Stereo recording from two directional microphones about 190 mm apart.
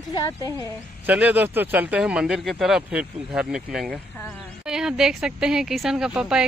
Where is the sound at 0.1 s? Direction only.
20° left (ahead or behind).